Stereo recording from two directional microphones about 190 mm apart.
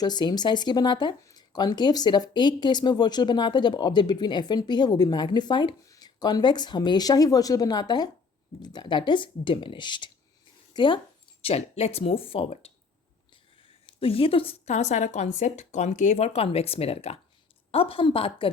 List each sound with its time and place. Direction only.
0.0 s speech: 20° left (ahead or behind)
13.8 s speech: 30° left (ahead or behind)